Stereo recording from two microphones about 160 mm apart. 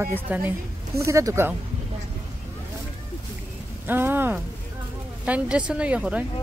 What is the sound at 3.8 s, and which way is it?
Speech, 15° right (ahead or behind).